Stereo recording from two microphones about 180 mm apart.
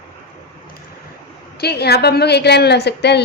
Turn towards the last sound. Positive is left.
turn(degrees=65)  # may be behind; listen again after turning